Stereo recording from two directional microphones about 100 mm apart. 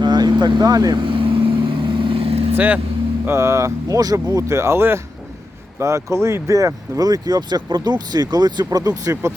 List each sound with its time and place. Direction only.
0.0 s vehicle: 50° right (ahead or behind)
1.0 s vehicle: 60° right (ahead or behind)
2.6 s speech: 15° right (ahead or behind)
3.2 s speech: 30° right (ahead or behind)